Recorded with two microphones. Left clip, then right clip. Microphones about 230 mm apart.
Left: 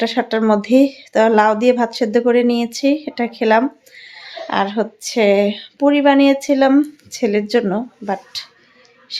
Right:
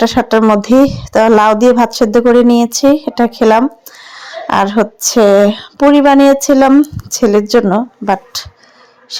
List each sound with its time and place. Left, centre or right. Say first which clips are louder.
0.0 s a woman's voice: right 7 dB; right